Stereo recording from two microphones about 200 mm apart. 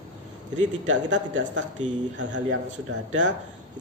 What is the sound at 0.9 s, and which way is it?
A man's voice, 65° right (ahead or behind).